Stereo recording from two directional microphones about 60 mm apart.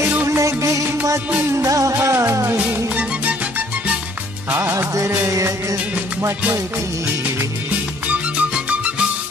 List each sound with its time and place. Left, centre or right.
0.1 s music: right
0.4 s music: right
2.0 s music: right
3.0 s music: right
4.6 s music: right
5.3 s music: right
8.1 s music: right